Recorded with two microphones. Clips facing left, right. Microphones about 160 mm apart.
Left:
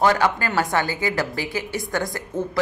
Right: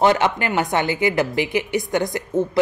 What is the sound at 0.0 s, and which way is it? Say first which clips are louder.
A woman's voice: right 2 dB; 20° right (ahead or behind).